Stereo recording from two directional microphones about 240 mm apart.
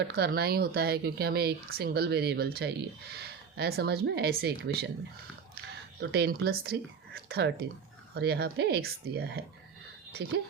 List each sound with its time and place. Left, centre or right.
0.2 s speech: right
6.0 s speech: right